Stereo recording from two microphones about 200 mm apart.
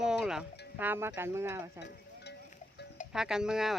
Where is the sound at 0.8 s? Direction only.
10° right (ahead or behind).